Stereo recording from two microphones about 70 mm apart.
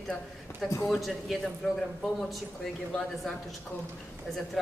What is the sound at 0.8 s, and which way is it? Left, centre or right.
Speech, centre.